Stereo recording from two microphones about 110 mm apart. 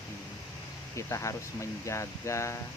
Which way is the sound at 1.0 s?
25° left (ahead or behind).